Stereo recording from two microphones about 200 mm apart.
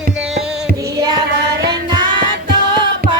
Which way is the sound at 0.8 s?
20° right (ahead or behind).